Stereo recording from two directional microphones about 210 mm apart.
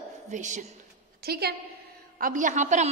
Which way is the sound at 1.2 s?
50° right (ahead or behind).